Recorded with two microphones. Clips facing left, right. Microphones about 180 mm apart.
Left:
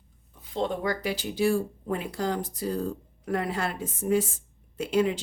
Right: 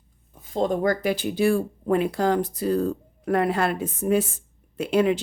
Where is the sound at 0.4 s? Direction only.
45° right (ahead or behind).